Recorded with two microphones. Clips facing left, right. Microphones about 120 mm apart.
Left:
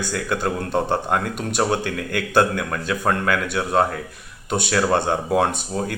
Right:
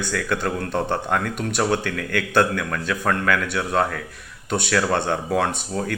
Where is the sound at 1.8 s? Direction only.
35° left (ahead or behind).